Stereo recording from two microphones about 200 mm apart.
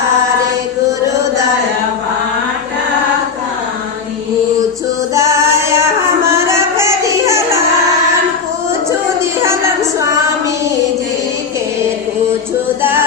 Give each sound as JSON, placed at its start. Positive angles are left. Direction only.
{"t": 5.1, "sound": "music", "side_deg": -15}
{"t": 6.3, "sound": "child singing", "side_deg": -15}
{"t": 8.9, "sound": "a sound", "side_deg": -15}
{"t": 10.0, "sound": "female singing", "side_deg": -15}